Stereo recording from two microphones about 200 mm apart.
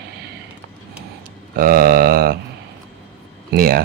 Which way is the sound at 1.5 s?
45° right (ahead or behind).